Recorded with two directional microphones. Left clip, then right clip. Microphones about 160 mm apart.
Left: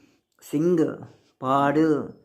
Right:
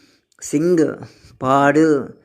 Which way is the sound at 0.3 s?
10° right (ahead or behind).